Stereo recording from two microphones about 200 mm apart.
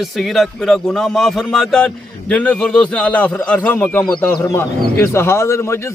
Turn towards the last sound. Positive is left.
turn(degrees=15)  # may be behind; listen again after turning